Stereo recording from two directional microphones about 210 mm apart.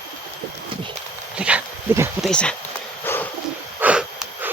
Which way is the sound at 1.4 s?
5° right (ahead or behind).